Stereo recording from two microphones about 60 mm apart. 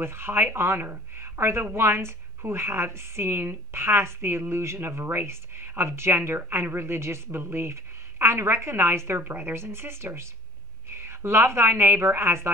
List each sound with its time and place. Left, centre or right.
0.0 s a woman's voice: right